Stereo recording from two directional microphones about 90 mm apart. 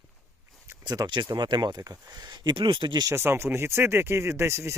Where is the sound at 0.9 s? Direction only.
55° right (ahead or behind).